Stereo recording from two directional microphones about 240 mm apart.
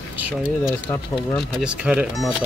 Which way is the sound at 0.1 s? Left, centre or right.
Centre.